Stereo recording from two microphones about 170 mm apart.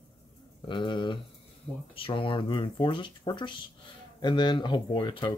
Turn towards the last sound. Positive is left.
turn(degrees=25)  # may be behind; listen again after turning